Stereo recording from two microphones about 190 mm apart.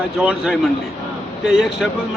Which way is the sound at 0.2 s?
5° right (ahead or behind).